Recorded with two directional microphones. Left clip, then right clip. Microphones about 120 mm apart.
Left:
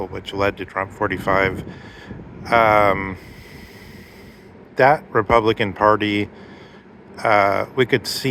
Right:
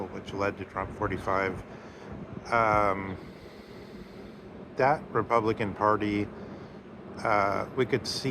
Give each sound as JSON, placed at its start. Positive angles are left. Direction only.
{"t": 0.0, "sound": "speech", "side_deg": 60}
{"t": 4.8, "sound": "speech", "side_deg": 60}